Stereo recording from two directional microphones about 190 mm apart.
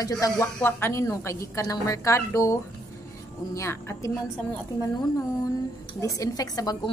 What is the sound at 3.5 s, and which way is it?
A woman's voice, 15° left (ahead or behind).